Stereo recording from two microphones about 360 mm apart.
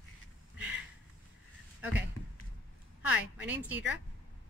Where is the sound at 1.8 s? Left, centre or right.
Centre.